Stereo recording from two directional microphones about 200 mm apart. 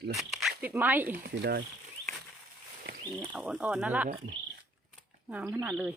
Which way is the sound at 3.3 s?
5° right (ahead or behind).